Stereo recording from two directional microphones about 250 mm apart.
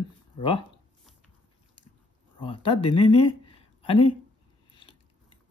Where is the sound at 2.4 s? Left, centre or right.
Left.